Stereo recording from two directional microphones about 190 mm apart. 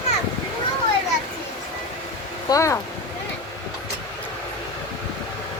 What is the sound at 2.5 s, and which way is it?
Speech, 15° left (ahead or behind).